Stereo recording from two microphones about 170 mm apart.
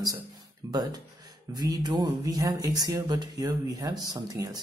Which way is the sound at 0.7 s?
20° right (ahead or behind).